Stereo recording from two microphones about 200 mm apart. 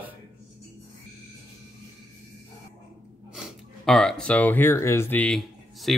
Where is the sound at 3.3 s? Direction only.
Centre (ahead or behind).